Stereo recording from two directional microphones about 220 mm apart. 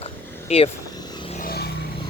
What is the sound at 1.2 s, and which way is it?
Vehicle, 35° left (ahead or behind).